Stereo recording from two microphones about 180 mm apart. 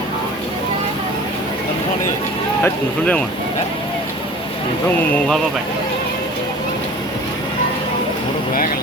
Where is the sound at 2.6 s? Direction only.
5° left (ahead or behind).